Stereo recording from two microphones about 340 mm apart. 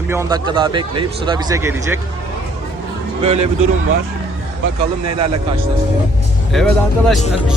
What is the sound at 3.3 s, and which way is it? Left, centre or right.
Speech, right.